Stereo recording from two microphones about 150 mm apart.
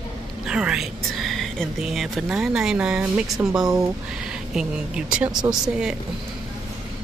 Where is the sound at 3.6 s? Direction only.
25° right (ahead or behind).